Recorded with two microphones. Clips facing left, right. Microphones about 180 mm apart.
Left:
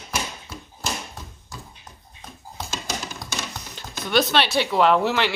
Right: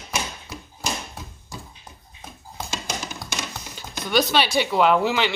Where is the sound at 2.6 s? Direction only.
15° right (ahead or behind).